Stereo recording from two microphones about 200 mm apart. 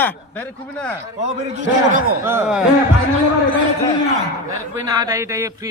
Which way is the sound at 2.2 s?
10° right (ahead or behind).